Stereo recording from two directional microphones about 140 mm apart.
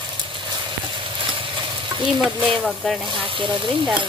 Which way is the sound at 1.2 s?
35° right (ahead or behind).